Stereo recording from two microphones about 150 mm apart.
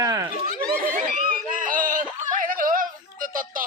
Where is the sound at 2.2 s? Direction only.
60° right (ahead or behind).